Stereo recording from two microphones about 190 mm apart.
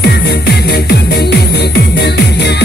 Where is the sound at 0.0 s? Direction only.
60° left (ahead or behind).